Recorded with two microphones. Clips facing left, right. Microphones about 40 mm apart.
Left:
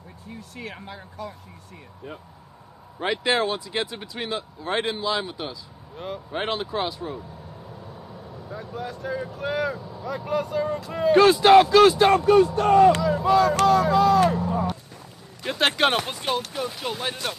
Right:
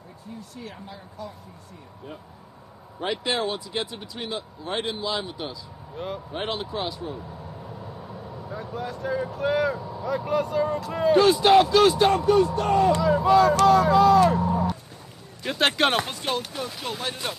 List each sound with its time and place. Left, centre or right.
0.6 s speech: left
3.0 s speech: left
5.9 s speech: centre
6.3 s speech: left
8.5 s speech: centre
11.1 s speech: left
12.6 s speech: centre
15.4 s speech: centre